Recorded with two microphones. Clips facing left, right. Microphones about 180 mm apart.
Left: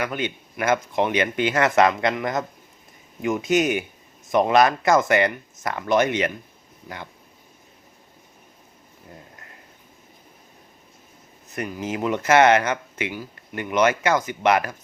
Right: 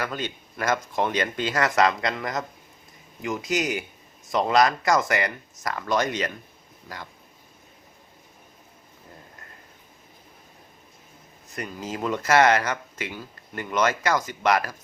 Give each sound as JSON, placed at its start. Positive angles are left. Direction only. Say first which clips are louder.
{"t": 0.0, "sound": "speech", "louder": "left 4 dB", "side_deg": 20}
{"t": 11.5, "sound": "speech", "louder": "left 5 dB", "side_deg": 20}